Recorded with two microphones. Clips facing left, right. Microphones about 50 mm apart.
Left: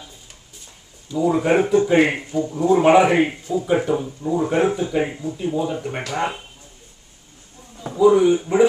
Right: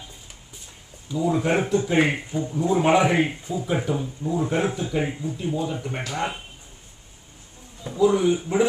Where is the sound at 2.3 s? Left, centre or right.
Centre.